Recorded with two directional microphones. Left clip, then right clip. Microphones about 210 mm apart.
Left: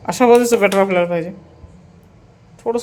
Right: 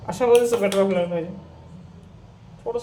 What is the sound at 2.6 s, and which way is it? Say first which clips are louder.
Speech: left 7 dB; 50° left (ahead or behind).